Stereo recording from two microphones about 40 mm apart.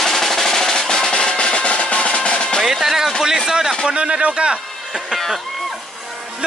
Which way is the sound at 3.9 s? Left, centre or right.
Right.